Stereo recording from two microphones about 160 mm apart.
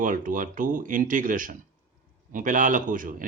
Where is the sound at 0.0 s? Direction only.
55° right (ahead or behind).